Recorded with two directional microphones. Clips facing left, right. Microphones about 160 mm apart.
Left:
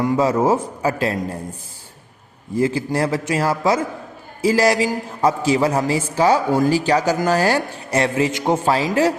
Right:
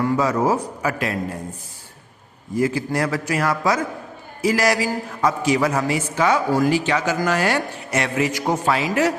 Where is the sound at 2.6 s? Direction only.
30° left (ahead or behind).